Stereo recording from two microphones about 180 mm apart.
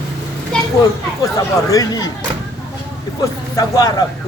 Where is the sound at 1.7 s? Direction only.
20° left (ahead or behind).